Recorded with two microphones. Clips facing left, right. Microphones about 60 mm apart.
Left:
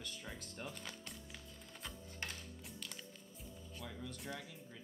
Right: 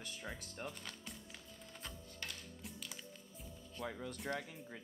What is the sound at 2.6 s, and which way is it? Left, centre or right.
Music, centre.